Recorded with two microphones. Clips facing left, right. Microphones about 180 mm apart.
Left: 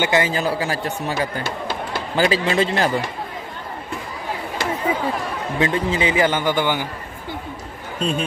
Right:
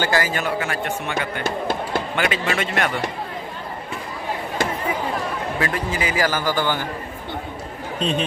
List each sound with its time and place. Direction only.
0.0 s a man's voice: 25° left (ahead or behind)
5.6 s a man's voice: 25° left (ahead or behind)
8.0 s speech: 5° left (ahead or behind)